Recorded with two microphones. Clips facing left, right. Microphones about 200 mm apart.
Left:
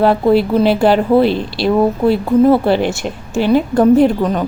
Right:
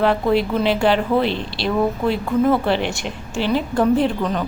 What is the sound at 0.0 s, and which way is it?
A woman's voice, 40° left (ahead or behind).